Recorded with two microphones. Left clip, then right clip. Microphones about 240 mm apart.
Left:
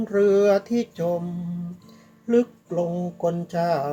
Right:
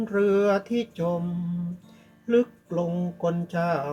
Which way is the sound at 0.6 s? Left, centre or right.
Left.